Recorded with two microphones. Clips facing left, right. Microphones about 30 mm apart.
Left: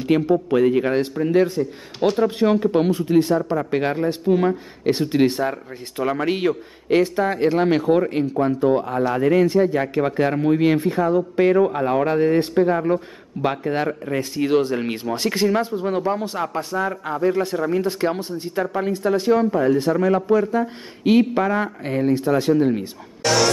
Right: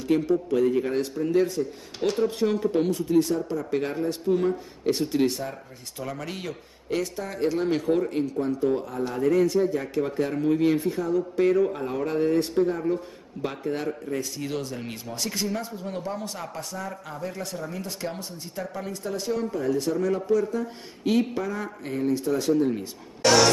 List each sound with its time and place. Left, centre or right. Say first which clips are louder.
0.0 s speech: left 5 dB; left
1.6 s speech: left 6 dB; centre
2.2 s speech: left 6 dB; left
12.2 s speech: left 1 dB; left
12.6 s speech: left 6 dB; left
21.4 s speech: left 10 dB; left
21.8 s speech: left 4 dB; left
23.2 s music: even; centre